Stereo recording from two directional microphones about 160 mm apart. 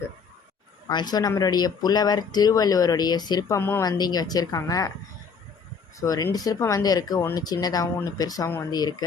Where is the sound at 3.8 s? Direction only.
25° left (ahead or behind).